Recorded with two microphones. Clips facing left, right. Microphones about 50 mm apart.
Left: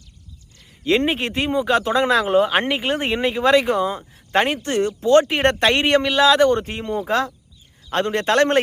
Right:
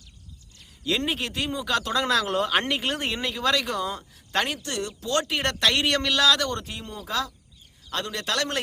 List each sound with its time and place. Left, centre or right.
0.9 s speech: left